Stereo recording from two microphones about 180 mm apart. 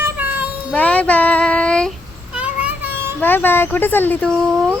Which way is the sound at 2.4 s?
10° right (ahead or behind).